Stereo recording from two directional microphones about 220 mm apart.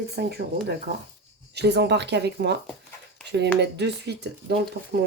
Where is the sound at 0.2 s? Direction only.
45° right (ahead or behind).